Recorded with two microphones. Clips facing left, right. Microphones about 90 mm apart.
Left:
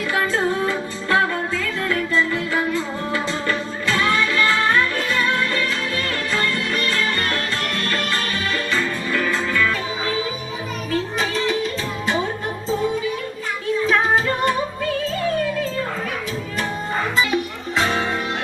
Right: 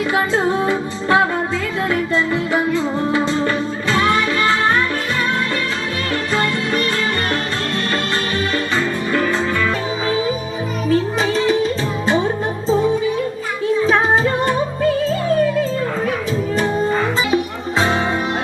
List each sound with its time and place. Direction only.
0.1 s music: 25° right (ahead or behind)
1.9 s music: 20° right (ahead or behind)
6.3 s music: 25° right (ahead or behind)
8.7 s music: 30° right (ahead or behind)
11.4 s music: 30° right (ahead or behind)
17.2 s music: 25° right (ahead or behind)